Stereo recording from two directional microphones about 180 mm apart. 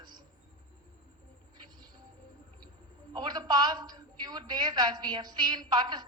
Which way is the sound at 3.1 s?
25° right (ahead or behind).